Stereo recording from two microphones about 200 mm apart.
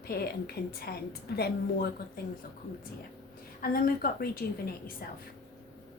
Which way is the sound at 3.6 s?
45° left (ahead or behind).